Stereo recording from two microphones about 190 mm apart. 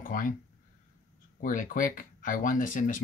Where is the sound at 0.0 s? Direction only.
45° left (ahead or behind).